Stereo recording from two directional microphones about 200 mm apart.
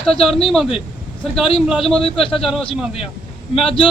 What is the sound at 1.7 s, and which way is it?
Speech, centre (ahead or behind).